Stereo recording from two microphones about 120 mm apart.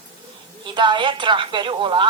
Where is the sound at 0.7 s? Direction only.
40° right (ahead or behind).